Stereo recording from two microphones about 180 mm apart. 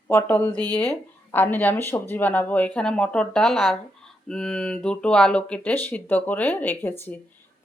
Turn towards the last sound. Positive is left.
turn(degrees=10)  # may be behind; listen again after turning